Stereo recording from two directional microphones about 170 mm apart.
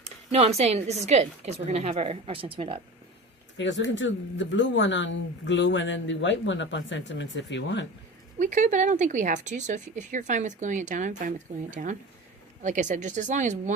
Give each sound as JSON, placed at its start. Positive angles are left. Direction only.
{"t": 0.0, "sound": "a woman's voice", "side_deg": -40}
{"t": 3.6, "sound": "speech", "side_deg": 90}
{"t": 8.4, "sound": "speech", "side_deg": -45}